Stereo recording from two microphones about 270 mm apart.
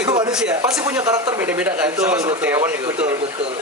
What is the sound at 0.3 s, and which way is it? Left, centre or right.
Speech, centre.